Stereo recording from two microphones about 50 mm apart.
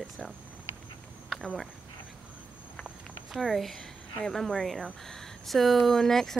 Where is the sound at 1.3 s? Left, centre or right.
Centre.